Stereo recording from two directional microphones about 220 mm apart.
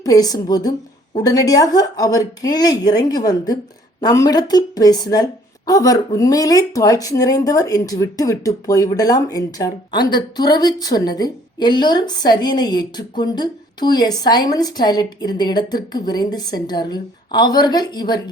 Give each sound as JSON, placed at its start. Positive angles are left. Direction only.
{"t": 0.0, "sound": "a woman's voice", "side_deg": 15}